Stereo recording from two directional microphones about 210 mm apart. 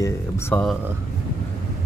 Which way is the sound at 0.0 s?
10° left (ahead or behind).